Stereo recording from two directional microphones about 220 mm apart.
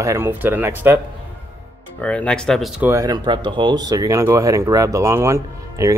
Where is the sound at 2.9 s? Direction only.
15° right (ahead or behind).